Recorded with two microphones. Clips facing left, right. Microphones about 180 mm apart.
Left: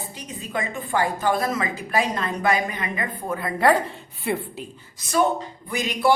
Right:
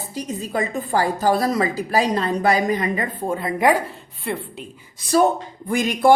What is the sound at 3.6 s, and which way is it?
Speech, 10° right (ahead or behind).